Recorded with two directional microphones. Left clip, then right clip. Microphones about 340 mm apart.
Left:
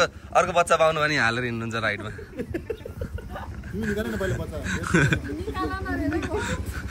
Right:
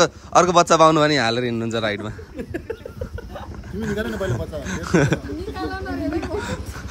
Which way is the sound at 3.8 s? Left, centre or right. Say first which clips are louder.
Right 3 dB; centre.